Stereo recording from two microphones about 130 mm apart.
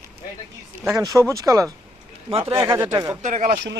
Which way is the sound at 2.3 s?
45° right (ahead or behind).